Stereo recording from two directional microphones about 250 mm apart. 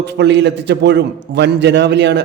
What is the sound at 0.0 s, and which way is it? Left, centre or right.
A man's voice, right.